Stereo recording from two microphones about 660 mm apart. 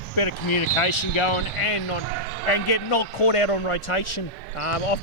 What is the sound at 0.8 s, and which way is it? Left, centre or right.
A man's voice, left.